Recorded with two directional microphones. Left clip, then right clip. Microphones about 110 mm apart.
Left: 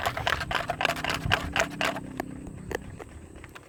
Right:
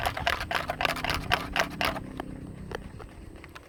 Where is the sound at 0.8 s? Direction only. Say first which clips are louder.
Left 1 dB; 20° left (ahead or behind).